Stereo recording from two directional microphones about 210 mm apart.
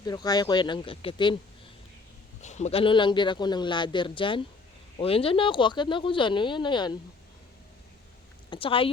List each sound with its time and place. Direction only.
0.0 s speech: 20° left (ahead or behind)
2.4 s speech: 35° left (ahead or behind)
8.4 s speech: 25° left (ahead or behind)